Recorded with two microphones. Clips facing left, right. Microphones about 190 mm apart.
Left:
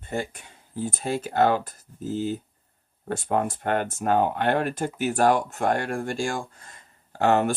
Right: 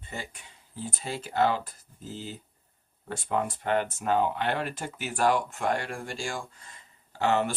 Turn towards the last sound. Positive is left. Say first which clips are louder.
# left 5 dB
turn(degrees=50)  # may be behind; listen again after turning